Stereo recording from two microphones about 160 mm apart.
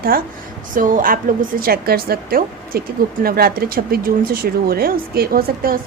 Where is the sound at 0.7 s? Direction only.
55° right (ahead or behind).